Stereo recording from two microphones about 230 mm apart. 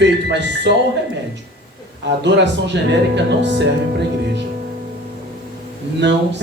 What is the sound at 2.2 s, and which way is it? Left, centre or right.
Music, right.